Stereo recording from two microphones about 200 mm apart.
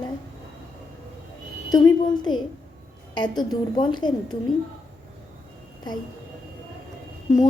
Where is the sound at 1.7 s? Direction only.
20° left (ahead or behind).